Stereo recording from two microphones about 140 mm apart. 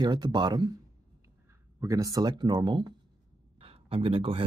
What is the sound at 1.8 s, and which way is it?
Speech, 25° right (ahead or behind).